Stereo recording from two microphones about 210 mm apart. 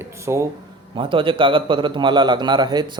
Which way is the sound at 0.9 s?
25° right (ahead or behind).